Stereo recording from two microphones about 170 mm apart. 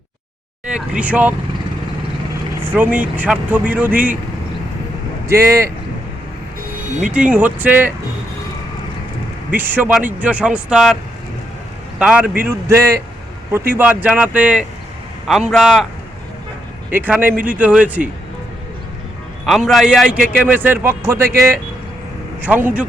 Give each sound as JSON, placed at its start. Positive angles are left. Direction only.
{"t": 0.7, "sound": "speech", "side_deg": -5}
{"t": 2.6, "sound": "speech", "side_deg": -10}
{"t": 5.3, "sound": "speech", "side_deg": -15}
{"t": 7.1, "sound": "speech", "side_deg": -5}
{"t": 9.5, "sound": "speech", "side_deg": -10}
{"t": 11.9, "sound": "a man's voice", "side_deg": -5}
{"t": 16.9, "sound": "speech", "side_deg": -10}
{"t": 19.5, "sound": "a man's voice", "side_deg": 0}
{"t": 20.1, "sound": "speech", "side_deg": -50}
{"t": 20.4, "sound": "speech", "side_deg": -10}